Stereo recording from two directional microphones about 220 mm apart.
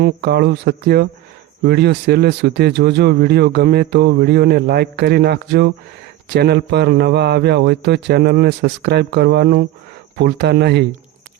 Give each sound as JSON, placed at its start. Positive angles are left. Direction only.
{"t": 0.0, "sound": "speech", "side_deg": -50}